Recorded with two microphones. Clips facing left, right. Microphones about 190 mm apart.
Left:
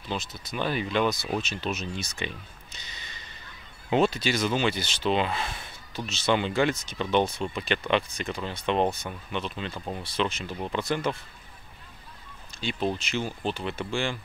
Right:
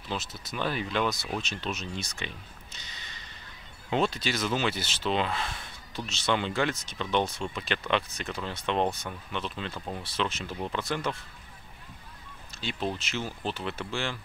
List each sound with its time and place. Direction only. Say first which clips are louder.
0.1 s speech: left 2 dB; 5° right (ahead or behind)
3.9 s speech: left 4 dB; 5° left (ahead or behind)
12.5 s speech: left 4 dB; centre (ahead or behind)